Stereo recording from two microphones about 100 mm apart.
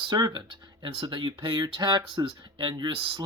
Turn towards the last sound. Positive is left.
turn(degrees=-50)  # may be behind; listen again after turning